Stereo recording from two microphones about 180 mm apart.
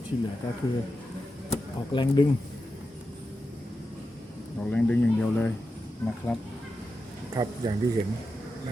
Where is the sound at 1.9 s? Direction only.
25° left (ahead or behind).